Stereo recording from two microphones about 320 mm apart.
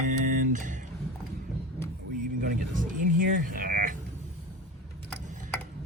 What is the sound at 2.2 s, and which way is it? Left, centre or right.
Speech, right.